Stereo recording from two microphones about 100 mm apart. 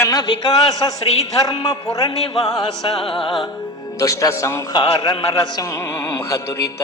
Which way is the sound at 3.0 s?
70° left (ahead or behind).